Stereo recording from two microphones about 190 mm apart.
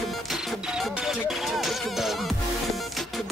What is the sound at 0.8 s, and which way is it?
Music, centre (ahead or behind).